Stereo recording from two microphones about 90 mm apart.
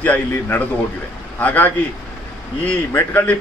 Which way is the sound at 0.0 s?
20° left (ahead or behind).